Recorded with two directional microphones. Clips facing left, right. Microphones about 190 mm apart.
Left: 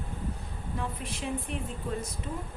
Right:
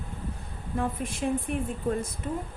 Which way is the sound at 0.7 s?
50° right (ahead or behind).